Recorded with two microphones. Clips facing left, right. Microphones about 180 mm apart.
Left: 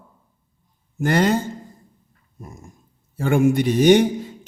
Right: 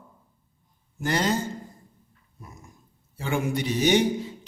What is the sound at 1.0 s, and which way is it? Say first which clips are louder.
Speech: left 7 dB; 55° left (ahead or behind).